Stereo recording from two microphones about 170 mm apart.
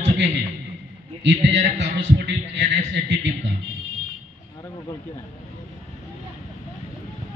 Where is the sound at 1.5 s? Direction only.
40° right (ahead or behind).